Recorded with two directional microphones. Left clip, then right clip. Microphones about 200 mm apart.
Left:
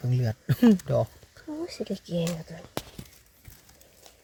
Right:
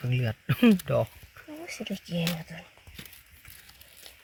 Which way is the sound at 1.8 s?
50° left (ahead or behind).